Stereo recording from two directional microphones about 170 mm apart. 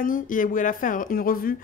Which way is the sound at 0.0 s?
50° left (ahead or behind).